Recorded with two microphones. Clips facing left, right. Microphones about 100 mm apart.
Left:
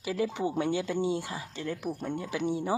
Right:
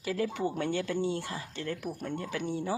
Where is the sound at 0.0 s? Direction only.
15° left (ahead or behind).